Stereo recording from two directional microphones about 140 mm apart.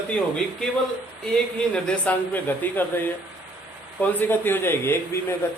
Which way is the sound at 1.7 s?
10° left (ahead or behind).